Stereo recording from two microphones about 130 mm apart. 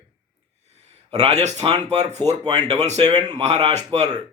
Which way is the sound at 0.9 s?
55° right (ahead or behind).